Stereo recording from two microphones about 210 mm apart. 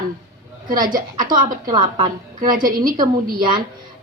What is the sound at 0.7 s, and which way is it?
A woman's voice, 40° right (ahead or behind).